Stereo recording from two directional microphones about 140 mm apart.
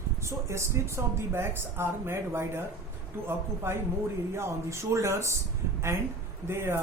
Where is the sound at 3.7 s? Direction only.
15° right (ahead or behind).